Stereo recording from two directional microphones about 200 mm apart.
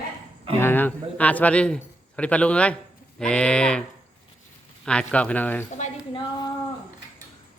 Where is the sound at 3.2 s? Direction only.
5° left (ahead or behind).